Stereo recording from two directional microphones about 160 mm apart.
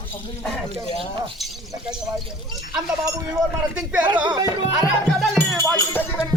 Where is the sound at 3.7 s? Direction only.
10° right (ahead or behind).